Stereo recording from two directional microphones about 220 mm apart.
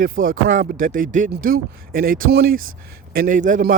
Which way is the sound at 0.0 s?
40° right (ahead or behind).